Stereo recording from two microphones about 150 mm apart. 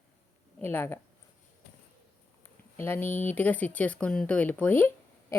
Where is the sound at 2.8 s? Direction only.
15° left (ahead or behind).